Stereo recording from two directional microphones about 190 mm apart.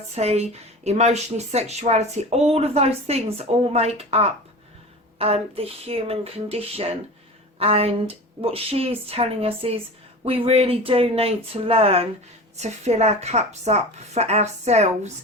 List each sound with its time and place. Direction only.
0.2 s speech: 35° right (ahead or behind)